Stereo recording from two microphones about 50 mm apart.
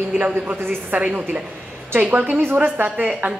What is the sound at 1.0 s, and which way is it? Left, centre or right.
A woman's voice, right.